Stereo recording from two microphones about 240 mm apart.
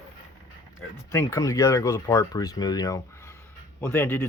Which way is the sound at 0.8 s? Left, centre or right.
Centre.